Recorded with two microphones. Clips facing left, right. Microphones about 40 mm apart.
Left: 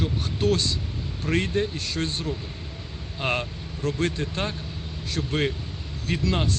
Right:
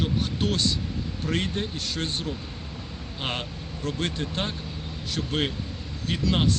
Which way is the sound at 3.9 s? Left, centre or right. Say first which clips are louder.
Left 1 dB; right.